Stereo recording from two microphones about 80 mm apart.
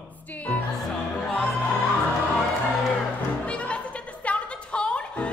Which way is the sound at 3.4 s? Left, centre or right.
Centre.